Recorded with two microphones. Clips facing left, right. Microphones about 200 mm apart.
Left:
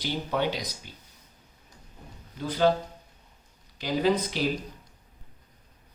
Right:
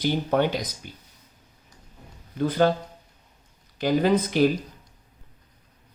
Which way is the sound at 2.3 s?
55° right (ahead or behind).